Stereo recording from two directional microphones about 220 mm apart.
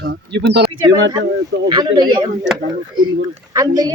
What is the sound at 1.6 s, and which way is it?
Speech, 20° right (ahead or behind).